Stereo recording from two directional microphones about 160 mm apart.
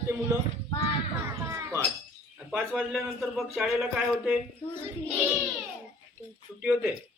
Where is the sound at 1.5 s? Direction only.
20° right (ahead or behind).